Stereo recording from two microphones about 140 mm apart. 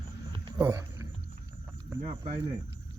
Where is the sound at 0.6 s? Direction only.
20° right (ahead or behind).